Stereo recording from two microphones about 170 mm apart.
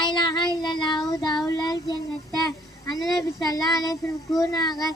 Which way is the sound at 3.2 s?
Centre (ahead or behind).